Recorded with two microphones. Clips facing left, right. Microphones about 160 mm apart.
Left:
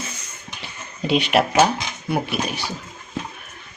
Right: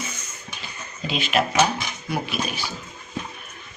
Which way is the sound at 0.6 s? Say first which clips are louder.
Left 5 dB; 65° left (ahead or behind).